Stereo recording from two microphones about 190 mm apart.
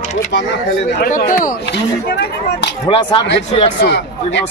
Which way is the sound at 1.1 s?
45° left (ahead or behind).